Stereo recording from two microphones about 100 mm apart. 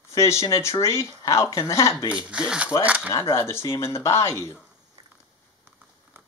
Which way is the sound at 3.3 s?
30° left (ahead or behind).